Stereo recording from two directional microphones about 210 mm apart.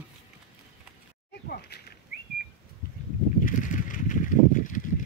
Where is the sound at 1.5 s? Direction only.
50° left (ahead or behind).